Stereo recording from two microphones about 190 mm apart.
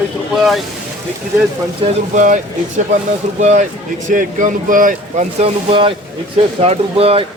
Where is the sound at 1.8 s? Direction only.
40° right (ahead or behind).